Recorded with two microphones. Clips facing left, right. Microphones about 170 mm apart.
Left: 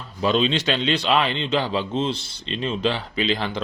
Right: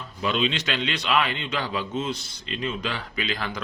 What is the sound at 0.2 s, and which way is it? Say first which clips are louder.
A man's voice: left 5 dB; 35° left (ahead or behind).